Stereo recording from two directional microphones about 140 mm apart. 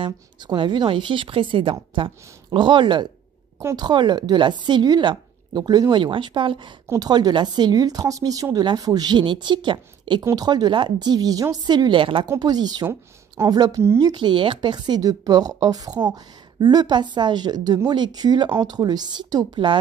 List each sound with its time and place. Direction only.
0.0 s a woman's voice: 35° right (ahead or behind)
14.1 s a woman's voice: 35° right (ahead or behind)